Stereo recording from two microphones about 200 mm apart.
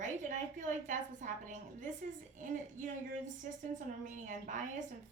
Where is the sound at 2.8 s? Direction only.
40° right (ahead or behind).